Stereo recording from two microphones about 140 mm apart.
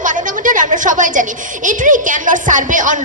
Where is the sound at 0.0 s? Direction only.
65° right (ahead or behind).